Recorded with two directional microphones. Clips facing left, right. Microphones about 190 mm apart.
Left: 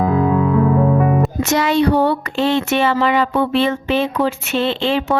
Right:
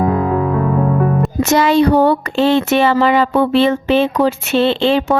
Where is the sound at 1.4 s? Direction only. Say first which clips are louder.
Right 7 dB; 30° right (ahead or behind).